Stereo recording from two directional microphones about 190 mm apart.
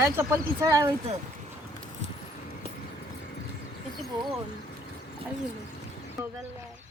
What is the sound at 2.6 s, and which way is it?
Clip-clop, 30° right (ahead or behind).